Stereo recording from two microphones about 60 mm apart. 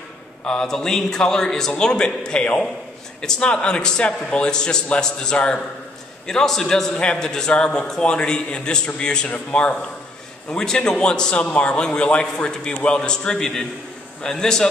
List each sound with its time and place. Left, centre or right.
0.5 s a man's voice: centre